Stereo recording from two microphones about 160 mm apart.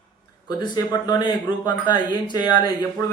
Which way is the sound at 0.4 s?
25° left (ahead or behind).